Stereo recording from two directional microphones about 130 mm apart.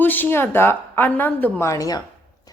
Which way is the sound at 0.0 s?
15° left (ahead or behind).